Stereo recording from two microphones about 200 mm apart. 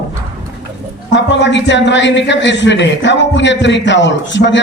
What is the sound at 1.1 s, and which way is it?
A man's voice, 60° left (ahead or behind).